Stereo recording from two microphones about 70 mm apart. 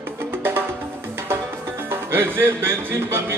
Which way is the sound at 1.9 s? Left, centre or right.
Right.